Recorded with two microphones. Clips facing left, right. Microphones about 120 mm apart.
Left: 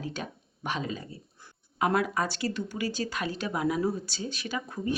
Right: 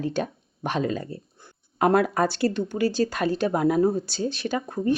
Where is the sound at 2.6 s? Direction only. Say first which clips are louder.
Right 9 dB; 35° right (ahead or behind); by 4.3 s 50° right (ahead or behind).